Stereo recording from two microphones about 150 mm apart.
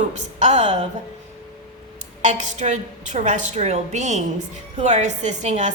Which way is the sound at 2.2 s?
50° right (ahead or behind).